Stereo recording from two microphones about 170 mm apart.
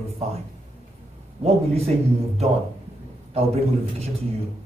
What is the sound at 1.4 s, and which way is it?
Speech, 40° right (ahead or behind).